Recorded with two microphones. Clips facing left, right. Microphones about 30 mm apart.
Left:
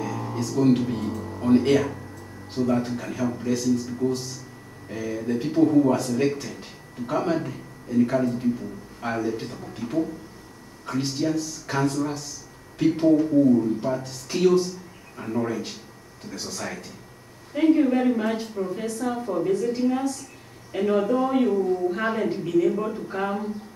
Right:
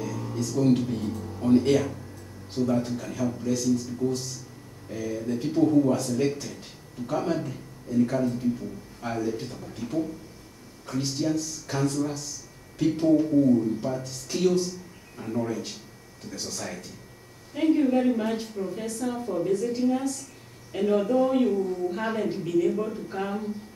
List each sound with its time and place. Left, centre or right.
0.0 s a man's voice: centre
15.1 s a man's voice: left
16.3 s speech: centre